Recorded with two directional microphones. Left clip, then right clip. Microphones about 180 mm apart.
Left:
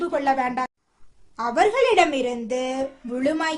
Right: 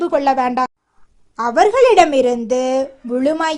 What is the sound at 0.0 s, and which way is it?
A woman's voice, 30° right (ahead or behind).